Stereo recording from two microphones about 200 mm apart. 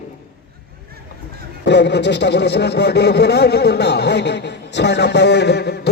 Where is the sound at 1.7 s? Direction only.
60° left (ahead or behind).